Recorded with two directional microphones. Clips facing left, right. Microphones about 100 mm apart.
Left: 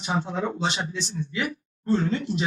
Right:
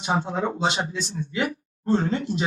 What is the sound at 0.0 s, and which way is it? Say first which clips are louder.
Speech: right 2 dB; 35° right (ahead or behind).